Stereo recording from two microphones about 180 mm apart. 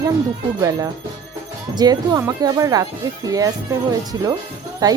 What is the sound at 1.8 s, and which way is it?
Speech, 20° right (ahead or behind).